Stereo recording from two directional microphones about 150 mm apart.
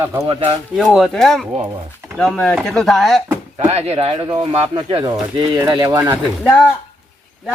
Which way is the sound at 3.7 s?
45° right (ahead or behind).